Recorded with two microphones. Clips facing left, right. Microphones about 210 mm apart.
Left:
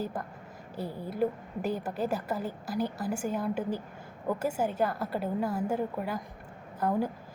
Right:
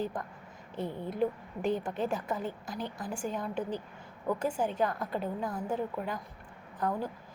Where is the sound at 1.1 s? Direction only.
5° left (ahead or behind).